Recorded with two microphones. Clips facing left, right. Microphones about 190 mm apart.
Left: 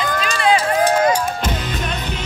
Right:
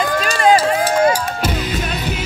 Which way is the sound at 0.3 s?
40° right (ahead or behind).